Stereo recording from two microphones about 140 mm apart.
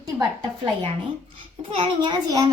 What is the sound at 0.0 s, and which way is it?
A woman's voice, 35° right (ahead or behind).